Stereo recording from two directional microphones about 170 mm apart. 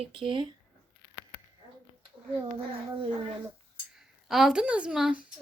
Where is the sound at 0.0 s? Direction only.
30° right (ahead or behind).